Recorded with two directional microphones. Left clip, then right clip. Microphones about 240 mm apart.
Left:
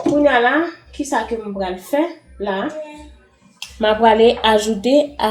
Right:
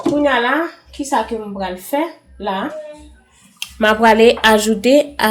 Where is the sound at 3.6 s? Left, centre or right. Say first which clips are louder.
Right 2 dB; right.